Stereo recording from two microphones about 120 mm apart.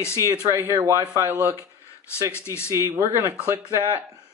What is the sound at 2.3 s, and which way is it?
Speech, 20° left (ahead or behind).